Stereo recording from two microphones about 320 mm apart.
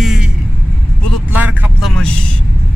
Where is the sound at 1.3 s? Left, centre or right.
Centre.